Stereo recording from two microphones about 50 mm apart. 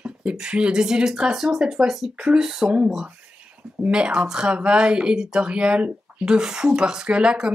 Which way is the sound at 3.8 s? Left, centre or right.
Centre.